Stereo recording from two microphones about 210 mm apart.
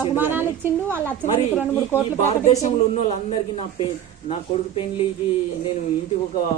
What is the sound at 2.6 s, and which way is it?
Speech, 35° left (ahead or behind).